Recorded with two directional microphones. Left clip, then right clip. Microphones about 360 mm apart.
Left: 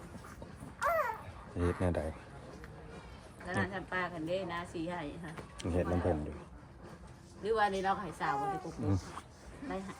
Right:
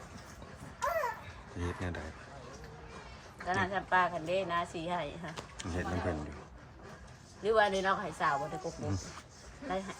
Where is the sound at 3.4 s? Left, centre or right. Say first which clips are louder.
Right 4 dB; right.